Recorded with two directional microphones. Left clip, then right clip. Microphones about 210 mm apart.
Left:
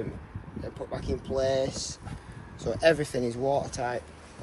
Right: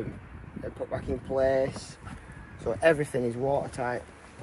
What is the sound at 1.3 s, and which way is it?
Speech, 25° right (ahead or behind).